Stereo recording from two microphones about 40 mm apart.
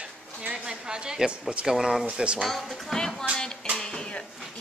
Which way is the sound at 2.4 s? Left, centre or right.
Centre.